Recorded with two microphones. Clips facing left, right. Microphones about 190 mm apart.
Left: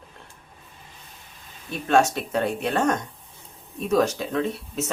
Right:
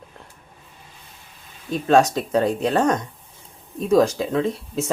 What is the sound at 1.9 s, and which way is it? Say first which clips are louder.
Speech: right 3 dB; 35° right (ahead or behind).